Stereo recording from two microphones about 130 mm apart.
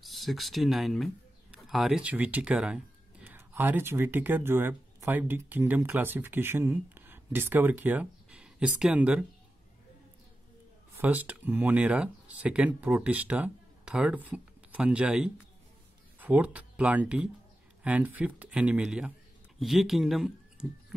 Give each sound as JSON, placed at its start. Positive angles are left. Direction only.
{"t": 0.0, "sound": "speech", "side_deg": 0}
{"t": 11.0, "sound": "speech", "side_deg": -10}